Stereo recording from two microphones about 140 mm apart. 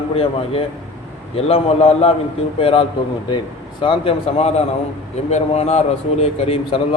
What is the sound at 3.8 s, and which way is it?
A man's voice, 40° left (ahead or behind).